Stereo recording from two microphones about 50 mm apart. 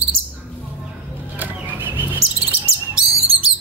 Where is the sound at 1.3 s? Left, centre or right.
Right.